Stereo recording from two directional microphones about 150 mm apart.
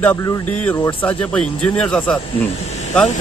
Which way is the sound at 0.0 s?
15° left (ahead or behind).